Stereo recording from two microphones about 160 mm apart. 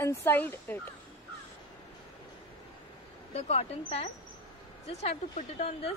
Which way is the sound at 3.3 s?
40° left (ahead or behind).